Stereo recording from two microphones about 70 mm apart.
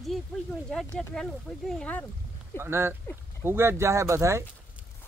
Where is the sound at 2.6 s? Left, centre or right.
Right.